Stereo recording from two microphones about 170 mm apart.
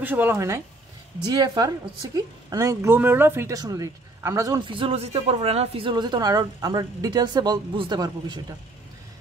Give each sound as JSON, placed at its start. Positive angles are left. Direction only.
{"t": 0.0, "sound": "speech", "side_deg": -10}